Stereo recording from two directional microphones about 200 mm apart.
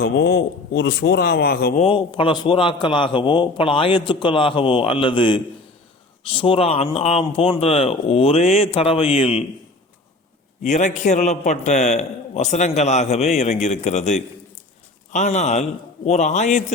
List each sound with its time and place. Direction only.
0.0 s a man's voice: 50° left (ahead or behind)
1.8 s a man's voice: 25° left (ahead or behind)
10.6 s a man's voice: 35° left (ahead or behind)